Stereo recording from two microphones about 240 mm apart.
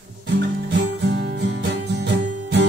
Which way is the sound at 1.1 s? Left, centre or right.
Right.